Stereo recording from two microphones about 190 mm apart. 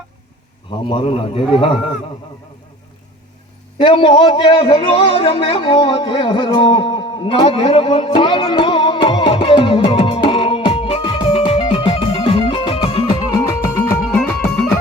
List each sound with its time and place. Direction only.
0.7 s a man's voice: 25° left (ahead or behind)
3.8 s a sound: 25° left (ahead or behind)
13.9 s music: 5° left (ahead or behind)